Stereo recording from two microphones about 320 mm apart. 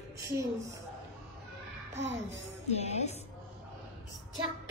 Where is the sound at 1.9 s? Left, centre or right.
Right.